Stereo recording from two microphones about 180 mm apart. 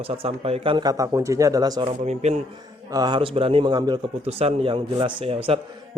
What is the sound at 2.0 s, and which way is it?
Mantra, 40° right (ahead or behind).